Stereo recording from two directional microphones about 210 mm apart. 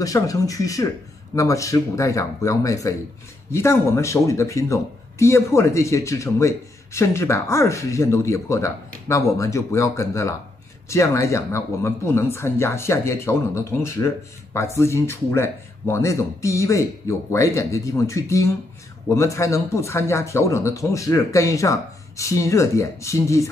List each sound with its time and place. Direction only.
0.0 s a man's voice: 15° left (ahead or behind)